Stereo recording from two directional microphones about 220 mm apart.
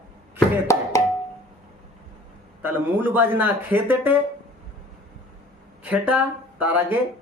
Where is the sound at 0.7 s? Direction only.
15° left (ahead or behind).